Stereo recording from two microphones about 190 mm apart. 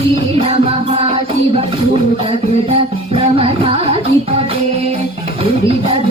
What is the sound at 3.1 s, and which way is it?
Music, 30° right (ahead or behind).